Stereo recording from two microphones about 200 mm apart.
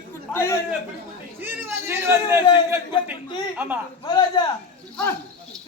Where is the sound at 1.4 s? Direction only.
10° right (ahead or behind).